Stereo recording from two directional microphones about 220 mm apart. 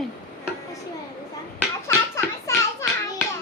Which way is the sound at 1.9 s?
10° left (ahead or behind).